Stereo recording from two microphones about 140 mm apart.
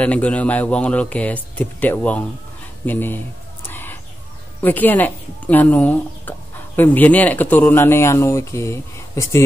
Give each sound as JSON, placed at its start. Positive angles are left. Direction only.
{"t": 0.0, "sound": "speech", "side_deg": 10}
{"t": 3.6, "sound": "a sound", "side_deg": 15}
{"t": 4.6, "sound": "speech", "side_deg": 15}